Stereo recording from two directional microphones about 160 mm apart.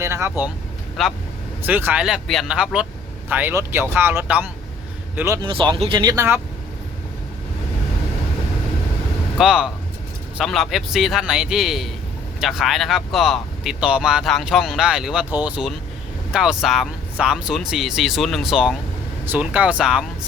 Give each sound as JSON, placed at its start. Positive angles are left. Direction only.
{"t": 0.0, "sound": "speech", "side_deg": -15}
{"t": 1.0, "sound": "speech", "side_deg": 0}
{"t": 1.6, "sound": "speech", "side_deg": -10}
{"t": 5.5, "sound": "speech", "side_deg": -30}
{"t": 9.4, "sound": "speech", "side_deg": -5}